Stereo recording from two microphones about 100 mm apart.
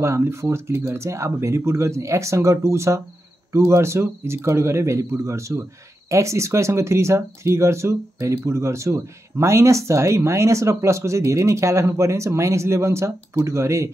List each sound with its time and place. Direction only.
0.0 s speech: 30° right (ahead or behind)